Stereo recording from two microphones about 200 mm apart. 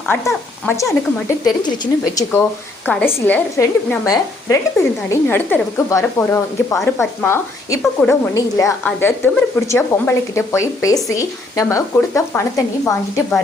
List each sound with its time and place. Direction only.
0.1 s a woman's voice: 10° left (ahead or behind)
2.8 s a woman's voice: 10° left (ahead or behind)